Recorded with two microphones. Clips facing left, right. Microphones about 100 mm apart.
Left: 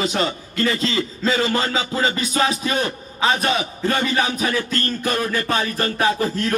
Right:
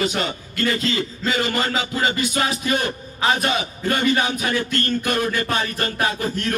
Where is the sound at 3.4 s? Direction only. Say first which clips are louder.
Left 2 dB; 30° left (ahead or behind).